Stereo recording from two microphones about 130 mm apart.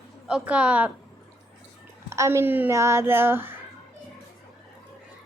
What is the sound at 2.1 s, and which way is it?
Speech, 20° right (ahead or behind).